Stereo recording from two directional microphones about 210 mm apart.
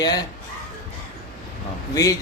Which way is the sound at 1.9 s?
15° left (ahead or behind).